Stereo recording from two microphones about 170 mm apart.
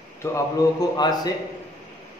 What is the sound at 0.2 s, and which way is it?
A man's voice, 20° left (ahead or behind).